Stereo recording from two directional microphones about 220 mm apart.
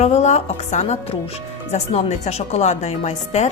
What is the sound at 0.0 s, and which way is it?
A woman's voice, 30° left (ahead or behind).